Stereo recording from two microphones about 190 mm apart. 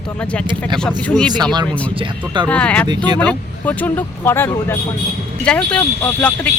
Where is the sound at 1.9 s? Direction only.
25° right (ahead or behind).